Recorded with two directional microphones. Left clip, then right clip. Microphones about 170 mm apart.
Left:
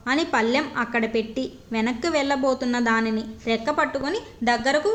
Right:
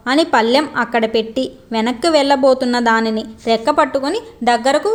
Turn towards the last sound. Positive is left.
turn(degrees=-35)  # may be behind; listen again after turning